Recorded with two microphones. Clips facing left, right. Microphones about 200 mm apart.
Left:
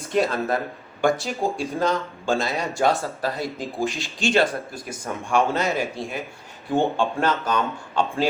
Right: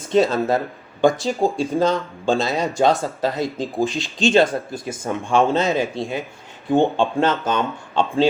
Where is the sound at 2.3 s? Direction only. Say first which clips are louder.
Right 4 dB; 20° right (ahead or behind).